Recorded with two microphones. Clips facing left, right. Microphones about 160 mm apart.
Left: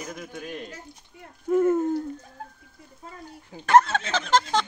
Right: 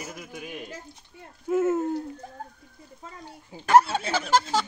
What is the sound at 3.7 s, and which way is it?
Snicker, 10° right (ahead or behind).